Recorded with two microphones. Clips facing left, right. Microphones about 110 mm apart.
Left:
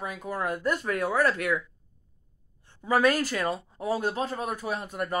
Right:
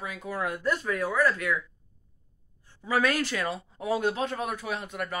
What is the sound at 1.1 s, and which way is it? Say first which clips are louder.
Speech: even; 65° left (ahead or behind).